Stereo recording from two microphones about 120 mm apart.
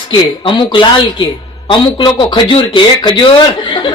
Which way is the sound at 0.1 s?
45° left (ahead or behind).